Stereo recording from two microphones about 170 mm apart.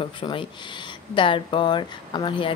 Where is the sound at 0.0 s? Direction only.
30° left (ahead or behind).